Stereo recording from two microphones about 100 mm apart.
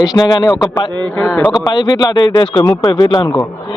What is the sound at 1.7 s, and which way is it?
Speech, 45° left (ahead or behind).